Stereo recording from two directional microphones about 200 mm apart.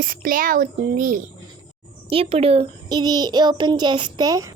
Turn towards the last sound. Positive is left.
turn(degrees=-15)  # may be behind; listen again after turning